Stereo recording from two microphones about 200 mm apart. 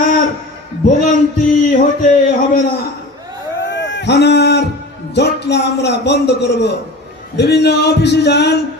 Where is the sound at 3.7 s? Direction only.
60° left (ahead or behind).